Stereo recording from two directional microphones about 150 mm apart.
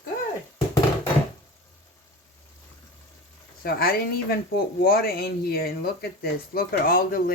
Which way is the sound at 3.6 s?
85° left.